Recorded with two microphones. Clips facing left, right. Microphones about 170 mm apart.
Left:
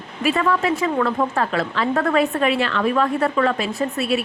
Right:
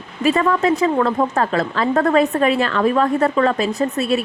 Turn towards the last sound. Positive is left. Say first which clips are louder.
# right 3 dB
turn(degrees=-40)  # may be behind; listen again after turning